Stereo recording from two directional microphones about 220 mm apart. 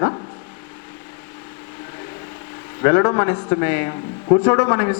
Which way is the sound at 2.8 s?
20° left (ahead or behind).